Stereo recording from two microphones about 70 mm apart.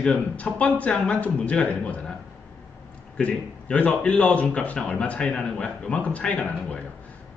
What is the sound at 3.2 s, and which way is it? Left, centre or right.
A man's voice, centre.